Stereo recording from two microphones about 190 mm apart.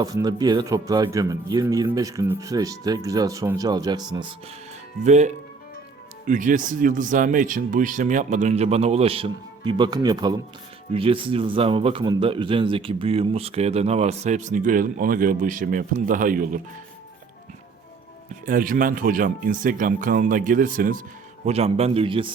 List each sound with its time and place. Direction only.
0.0 s speech: 20° right (ahead or behind)
5.0 s a man's voice: 40° right (ahead or behind)
18.4 s speech: 45° right (ahead or behind)
21.4 s a man's voice: 35° right (ahead or behind)